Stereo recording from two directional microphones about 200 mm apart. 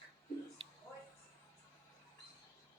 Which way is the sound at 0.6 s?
25° right (ahead or behind).